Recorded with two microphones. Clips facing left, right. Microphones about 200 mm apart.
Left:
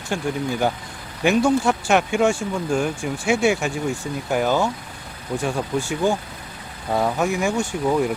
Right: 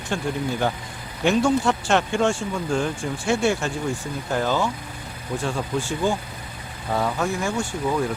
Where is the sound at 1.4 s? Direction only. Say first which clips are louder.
Left 2 dB; 15° left (ahead or behind).